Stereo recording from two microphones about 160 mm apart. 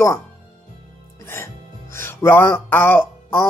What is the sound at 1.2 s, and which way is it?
Speech, 15° left (ahead or behind).